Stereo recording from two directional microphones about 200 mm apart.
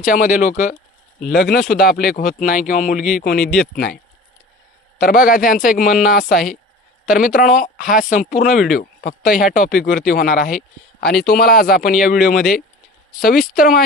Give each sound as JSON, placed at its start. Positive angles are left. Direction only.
{"t": 0.0, "sound": "speech", "side_deg": 40}
{"t": 1.3, "sound": "speech", "side_deg": 55}
{"t": 3.3, "sound": "speech", "side_deg": 0}
{"t": 4.9, "sound": "speech", "side_deg": 45}
{"t": 6.3, "sound": "speech", "side_deg": 0}
{"t": 7.0, "sound": "speech", "side_deg": 40}
{"t": 12.4, "sound": "speech", "side_deg": 0}
{"t": 13.5, "sound": "speech", "side_deg": 45}